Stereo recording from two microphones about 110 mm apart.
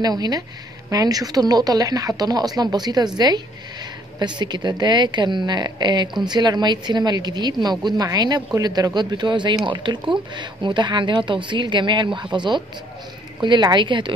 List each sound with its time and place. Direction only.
0.0 s a woman's voice: 40° right (ahead or behind)